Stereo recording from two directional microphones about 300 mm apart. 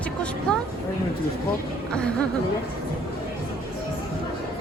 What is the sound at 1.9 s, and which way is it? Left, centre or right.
Speech, centre.